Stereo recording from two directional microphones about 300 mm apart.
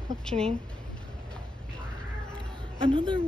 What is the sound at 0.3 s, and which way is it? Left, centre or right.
Speech, right.